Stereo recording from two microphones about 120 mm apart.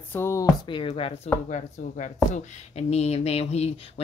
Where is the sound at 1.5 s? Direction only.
90° left.